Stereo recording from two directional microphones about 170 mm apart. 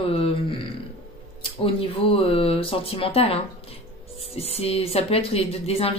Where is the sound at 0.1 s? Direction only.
35° left (ahead or behind).